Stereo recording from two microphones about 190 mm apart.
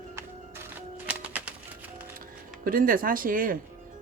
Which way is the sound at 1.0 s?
10° right (ahead or behind).